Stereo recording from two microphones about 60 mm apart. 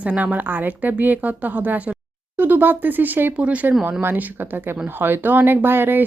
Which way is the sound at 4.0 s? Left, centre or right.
Right.